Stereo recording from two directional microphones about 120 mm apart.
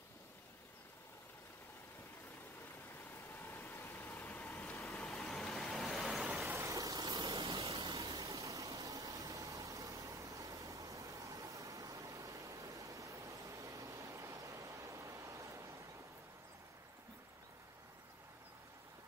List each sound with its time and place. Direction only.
3.3 s vehicle: 20° left (ahead or behind); by 6.4 s 5° right (ahead or behind)
6.4 s vehicle: 20° right (ahead or behind)